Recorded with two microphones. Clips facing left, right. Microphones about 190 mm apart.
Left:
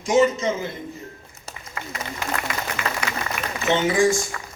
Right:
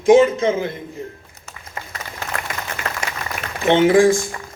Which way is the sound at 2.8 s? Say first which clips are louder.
Even; 50° right (ahead or behind).